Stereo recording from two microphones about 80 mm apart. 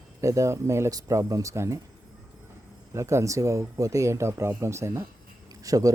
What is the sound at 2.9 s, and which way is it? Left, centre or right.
Speech, right.